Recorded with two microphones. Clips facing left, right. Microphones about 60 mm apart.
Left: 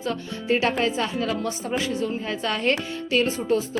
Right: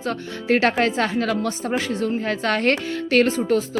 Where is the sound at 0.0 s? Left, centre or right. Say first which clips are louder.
Right 2 dB; right.